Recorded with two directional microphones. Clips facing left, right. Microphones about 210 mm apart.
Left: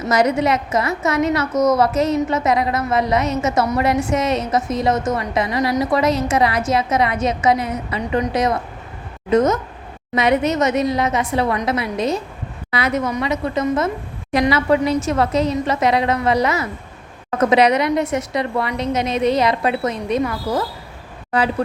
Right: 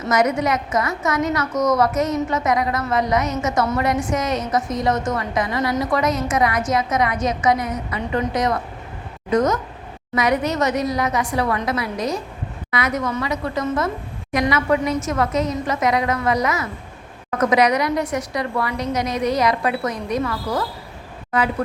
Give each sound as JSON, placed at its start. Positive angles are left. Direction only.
{"t": 0.1, "sound": "a woman's voice", "side_deg": 30}